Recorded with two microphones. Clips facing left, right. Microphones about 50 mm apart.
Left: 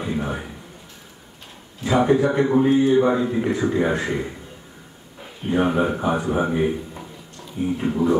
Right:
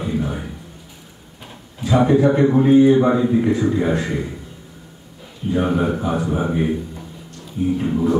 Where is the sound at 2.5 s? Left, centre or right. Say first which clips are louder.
Right 5 dB; centre.